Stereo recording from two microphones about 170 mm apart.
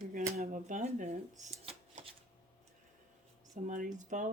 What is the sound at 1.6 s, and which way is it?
Shuffling cards, 35° right (ahead or behind).